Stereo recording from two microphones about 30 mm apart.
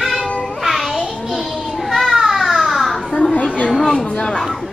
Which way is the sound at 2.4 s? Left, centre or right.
Centre.